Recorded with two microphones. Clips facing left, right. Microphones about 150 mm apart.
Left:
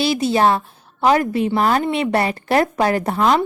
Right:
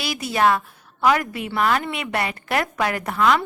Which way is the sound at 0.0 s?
30° left (ahead or behind).